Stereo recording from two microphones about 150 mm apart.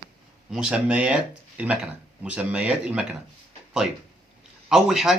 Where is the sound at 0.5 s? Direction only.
5° right (ahead or behind).